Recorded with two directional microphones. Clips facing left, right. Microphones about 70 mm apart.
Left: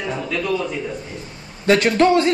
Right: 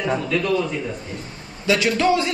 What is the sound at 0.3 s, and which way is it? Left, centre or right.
Speech, centre.